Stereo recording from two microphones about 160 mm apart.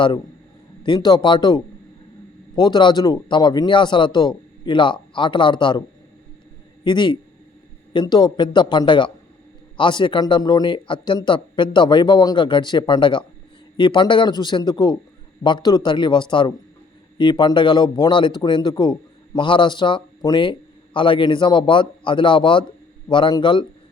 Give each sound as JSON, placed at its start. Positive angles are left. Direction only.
{"t": 0.9, "sound": "a man's voice", "side_deg": 25}
{"t": 6.8, "sound": "a man's voice", "side_deg": 30}